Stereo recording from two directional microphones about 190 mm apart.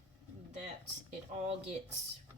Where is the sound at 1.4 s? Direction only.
35° right (ahead or behind).